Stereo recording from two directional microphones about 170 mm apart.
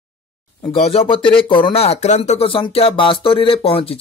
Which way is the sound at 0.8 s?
35° left (ahead or behind).